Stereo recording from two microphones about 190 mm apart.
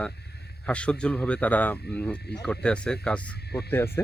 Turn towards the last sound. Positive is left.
turn(degrees=10)  # may be behind; listen again after turning